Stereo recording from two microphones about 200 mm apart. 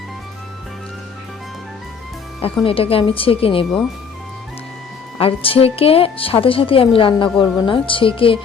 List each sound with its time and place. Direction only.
2.6 s a woman's voice: 30° left (ahead or behind)
5.1 s a woman's voice: 25° left (ahead or behind)